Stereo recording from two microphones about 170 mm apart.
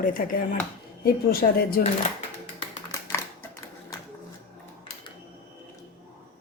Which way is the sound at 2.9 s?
20° left (ahead or behind).